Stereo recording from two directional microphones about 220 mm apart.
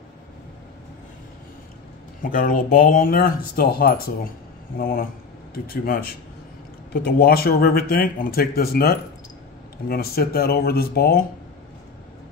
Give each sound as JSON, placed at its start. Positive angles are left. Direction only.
{"t": 2.2, "sound": "speech", "side_deg": 40}